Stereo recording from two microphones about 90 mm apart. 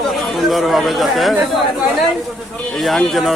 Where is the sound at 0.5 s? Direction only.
Centre (ahead or behind).